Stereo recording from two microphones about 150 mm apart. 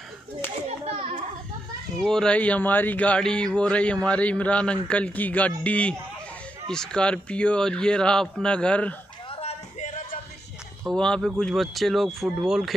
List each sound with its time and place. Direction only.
0.7 s children playing: 45° right (ahead or behind)
2.0 s speech: 5° left (ahead or behind)
9.3 s a sound: 45° left (ahead or behind)
10.9 s speech: 5° left (ahead or behind)